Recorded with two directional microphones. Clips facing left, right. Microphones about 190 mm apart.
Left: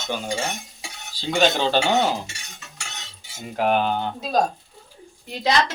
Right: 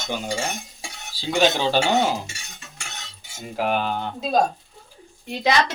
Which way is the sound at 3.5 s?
Centre (ahead or behind).